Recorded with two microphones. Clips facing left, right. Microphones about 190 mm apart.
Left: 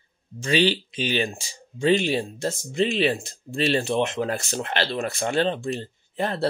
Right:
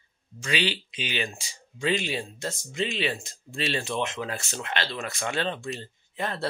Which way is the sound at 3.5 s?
50° left (ahead or behind).